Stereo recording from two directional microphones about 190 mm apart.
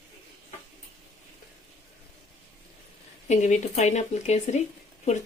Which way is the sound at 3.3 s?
40° left (ahead or behind).